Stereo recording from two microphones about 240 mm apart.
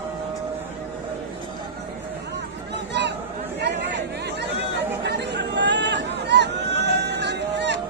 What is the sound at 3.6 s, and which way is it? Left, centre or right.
Chatter, right.